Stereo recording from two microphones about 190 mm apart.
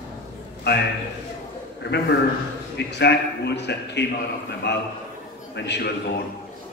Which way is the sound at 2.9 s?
60° left (ahead or behind).